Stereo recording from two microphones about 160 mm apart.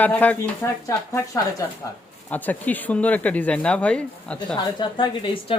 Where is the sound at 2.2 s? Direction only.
10° left (ahead or behind).